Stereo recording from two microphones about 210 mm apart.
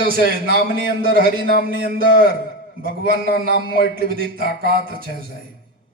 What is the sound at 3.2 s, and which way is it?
Speech, 50° left (ahead or behind).